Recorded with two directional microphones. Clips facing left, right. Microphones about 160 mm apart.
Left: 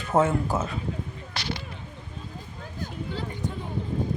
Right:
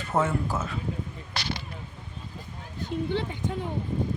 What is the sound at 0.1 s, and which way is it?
Speech, 20° left (ahead or behind).